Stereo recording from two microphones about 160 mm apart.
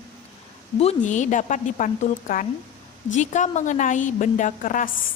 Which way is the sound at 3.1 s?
50° left (ahead or behind).